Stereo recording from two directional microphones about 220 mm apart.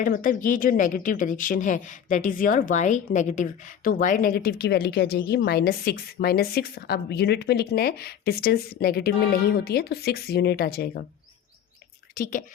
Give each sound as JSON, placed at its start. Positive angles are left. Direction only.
{"t": 0.0, "sound": "speech", "side_deg": 40}
{"t": 12.1, "sound": "a woman's voice", "side_deg": 40}